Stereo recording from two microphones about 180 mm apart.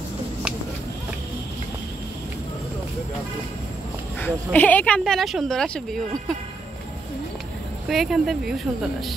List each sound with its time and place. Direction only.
4.2 s speech: 10° left (ahead or behind)
7.9 s speech: centre (ahead or behind)